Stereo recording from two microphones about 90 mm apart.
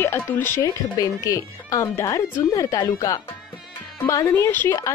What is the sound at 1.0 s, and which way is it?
Speech, 40° left (ahead or behind).